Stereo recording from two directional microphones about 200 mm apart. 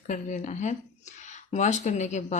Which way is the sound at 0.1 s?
40° left (ahead or behind).